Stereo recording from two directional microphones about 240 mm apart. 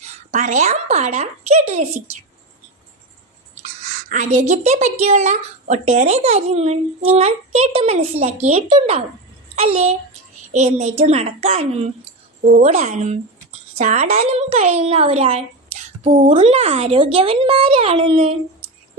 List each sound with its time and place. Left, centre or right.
0.0 s a woman's voice: right
4.1 s a woman's voice: right